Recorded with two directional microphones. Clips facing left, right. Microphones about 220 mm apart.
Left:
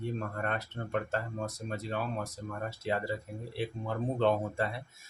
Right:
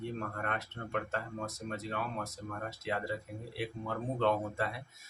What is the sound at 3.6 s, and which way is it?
Speech, 30° left (ahead or behind).